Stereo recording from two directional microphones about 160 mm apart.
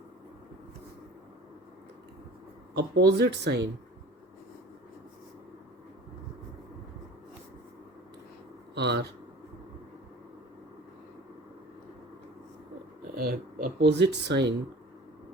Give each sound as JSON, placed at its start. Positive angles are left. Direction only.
{"t": 2.7, "sound": "speech", "side_deg": -90}
{"t": 8.7, "sound": "speech", "side_deg": -90}
{"t": 13.1, "sound": "speech", "side_deg": -65}